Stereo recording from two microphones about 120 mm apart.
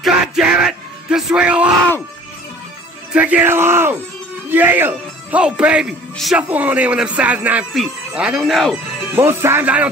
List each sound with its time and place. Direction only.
0.0 s music: 5° right (ahead or behind)
3.1 s music: 10° right (ahead or behind)
4.5 s speech: 15° right (ahead or behind)
5.4 s music: 10° right (ahead or behind)
7.7 s speech: centre (ahead or behind)
9.1 s speech: 20° right (ahead or behind)